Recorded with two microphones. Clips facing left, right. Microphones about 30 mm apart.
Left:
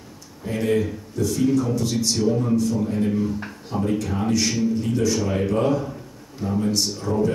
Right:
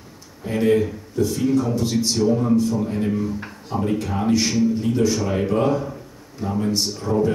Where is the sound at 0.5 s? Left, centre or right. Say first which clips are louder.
Right 3 dB; centre.